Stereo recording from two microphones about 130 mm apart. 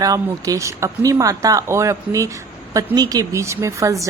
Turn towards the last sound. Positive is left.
turn(degrees=-25)  # may be behind; listen again after turning